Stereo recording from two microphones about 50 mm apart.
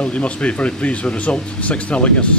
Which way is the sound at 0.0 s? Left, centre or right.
Left.